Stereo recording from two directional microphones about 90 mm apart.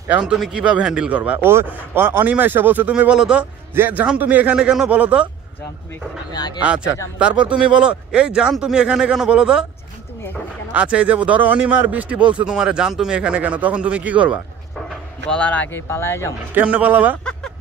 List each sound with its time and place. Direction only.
0.2 s a man's voice: 5° right (ahead or behind)
1.4 s a man's voice: 25° right (ahead or behind)
6.3 s speech: 50° left (ahead or behind)
6.6 s a man's voice: 10° right (ahead or behind)
10.7 s a man's voice: 15° right (ahead or behind)
15.2 s a man's voice: 10° left (ahead or behind)
15.7 s speech: 30° left (ahead or behind)
16.5 s a man's voice: 15° right (ahead or behind)
17.2 s a sound: 10° left (ahead or behind)